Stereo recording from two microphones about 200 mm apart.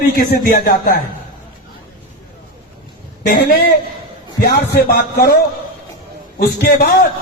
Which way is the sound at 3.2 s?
50° left (ahead or behind).